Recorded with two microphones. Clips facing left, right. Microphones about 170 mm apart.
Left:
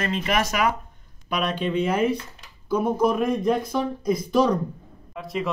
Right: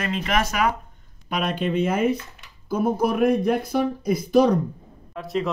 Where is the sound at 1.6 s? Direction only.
50° right (ahead or behind).